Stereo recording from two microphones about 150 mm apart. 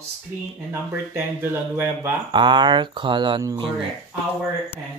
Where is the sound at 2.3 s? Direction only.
30° right (ahead or behind).